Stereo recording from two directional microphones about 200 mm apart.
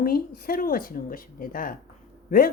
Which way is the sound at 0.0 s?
50° left (ahead or behind).